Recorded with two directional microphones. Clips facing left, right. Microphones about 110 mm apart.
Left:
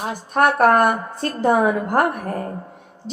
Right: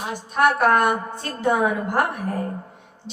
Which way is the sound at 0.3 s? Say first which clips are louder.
Left 3 dB; 45° left (ahead or behind).